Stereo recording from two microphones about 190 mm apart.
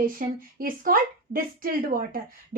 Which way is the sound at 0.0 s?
45° right (ahead or behind).